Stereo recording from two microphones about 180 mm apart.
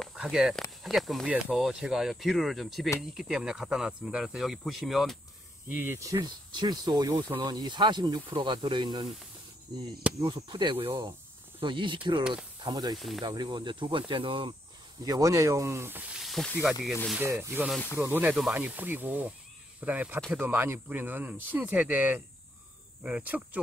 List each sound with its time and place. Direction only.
0.0 s speech: centre (ahead or behind)
5.8 s speech: 15° right (ahead or behind)
10.2 s speech: 25° right (ahead or behind)
12.9 s speech: centre (ahead or behind)
13.2 s speech: 25° right (ahead or behind); by 23.6 s 10° right (ahead or behind)